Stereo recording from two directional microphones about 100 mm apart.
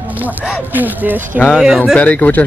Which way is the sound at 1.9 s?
15° left (ahead or behind).